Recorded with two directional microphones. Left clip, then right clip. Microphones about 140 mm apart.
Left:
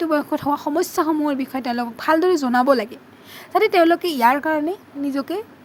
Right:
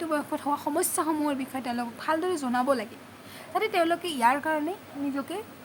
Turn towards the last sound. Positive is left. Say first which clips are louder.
# left 8 dB
turn(degrees=55)  # may be behind; listen again after turning